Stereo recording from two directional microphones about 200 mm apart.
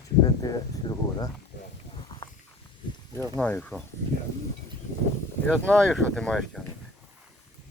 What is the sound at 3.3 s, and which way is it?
Speech, 5° left (ahead or behind).